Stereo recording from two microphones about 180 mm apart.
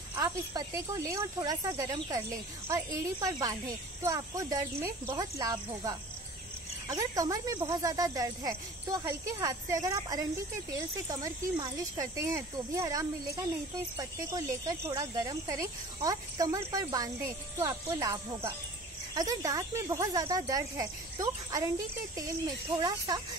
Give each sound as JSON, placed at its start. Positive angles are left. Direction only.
{"t": 0.1, "sound": "speech", "side_deg": -20}